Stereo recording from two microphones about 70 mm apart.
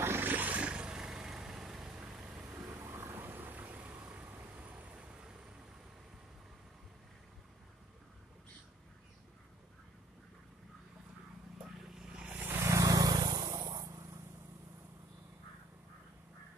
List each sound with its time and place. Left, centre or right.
0.0 s vehicle: right; by 2.2 s centre
2.6 s vehicle: right; by 5.5 s centre
11.6 s vehicle: centre
12.6 s vehicle: right